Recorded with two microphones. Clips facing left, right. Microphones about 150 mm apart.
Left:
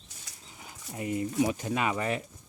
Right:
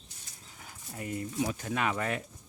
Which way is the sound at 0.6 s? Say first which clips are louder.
Left 4 dB; 15° left (ahead or behind).